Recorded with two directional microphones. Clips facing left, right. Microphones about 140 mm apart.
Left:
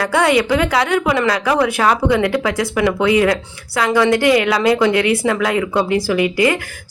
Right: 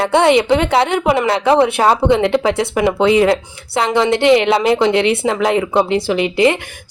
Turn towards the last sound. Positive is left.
turn(degrees=-25)  # may be behind; listen again after turning